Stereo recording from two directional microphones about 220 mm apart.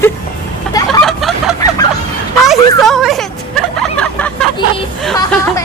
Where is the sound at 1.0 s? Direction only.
Centre (ahead or behind).